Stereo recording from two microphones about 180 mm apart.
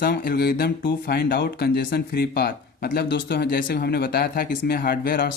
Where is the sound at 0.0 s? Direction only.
60° left (ahead or behind).